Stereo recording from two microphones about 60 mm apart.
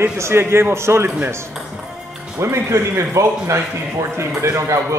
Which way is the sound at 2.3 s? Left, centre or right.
Right.